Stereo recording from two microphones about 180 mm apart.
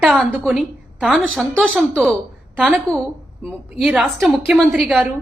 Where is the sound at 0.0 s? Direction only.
Centre (ahead or behind).